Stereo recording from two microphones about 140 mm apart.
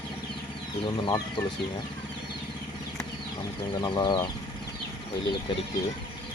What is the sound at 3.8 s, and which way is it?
Speech, 30° left (ahead or behind).